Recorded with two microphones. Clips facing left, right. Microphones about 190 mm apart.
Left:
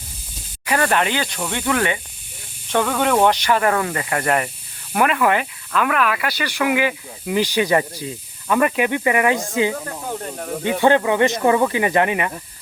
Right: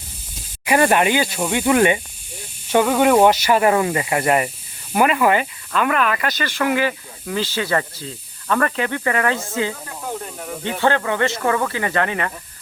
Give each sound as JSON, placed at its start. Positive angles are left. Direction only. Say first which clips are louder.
{"t": 0.6, "sound": "speech", "louder": "right 3 dB", "side_deg": -15}